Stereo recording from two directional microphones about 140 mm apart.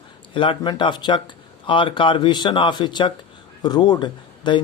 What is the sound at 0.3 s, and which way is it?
Speech, 35° left (ahead or behind).